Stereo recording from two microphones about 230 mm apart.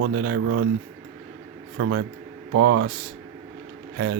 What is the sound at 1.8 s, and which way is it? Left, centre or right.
Speech, right.